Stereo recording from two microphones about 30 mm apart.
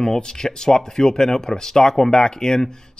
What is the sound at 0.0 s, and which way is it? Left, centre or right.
Speech, centre.